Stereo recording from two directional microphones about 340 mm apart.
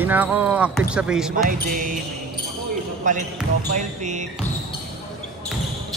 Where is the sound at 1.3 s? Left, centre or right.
Right.